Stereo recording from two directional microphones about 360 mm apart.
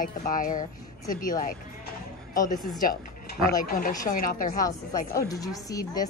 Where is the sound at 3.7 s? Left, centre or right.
Left.